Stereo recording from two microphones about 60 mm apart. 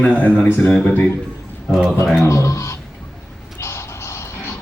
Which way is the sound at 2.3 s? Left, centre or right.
Left.